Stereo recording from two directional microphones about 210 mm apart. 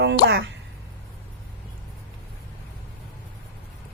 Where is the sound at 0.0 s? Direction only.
55° right (ahead or behind).